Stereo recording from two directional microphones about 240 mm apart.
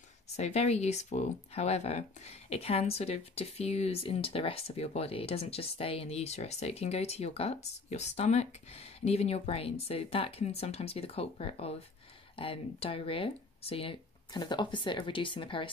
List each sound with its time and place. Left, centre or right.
0.4 s speech: left